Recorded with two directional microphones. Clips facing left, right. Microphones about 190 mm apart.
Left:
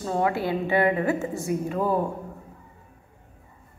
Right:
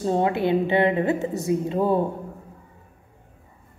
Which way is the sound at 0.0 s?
25° right (ahead or behind).